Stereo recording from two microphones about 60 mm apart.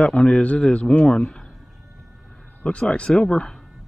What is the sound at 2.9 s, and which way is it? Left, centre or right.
Speech, centre.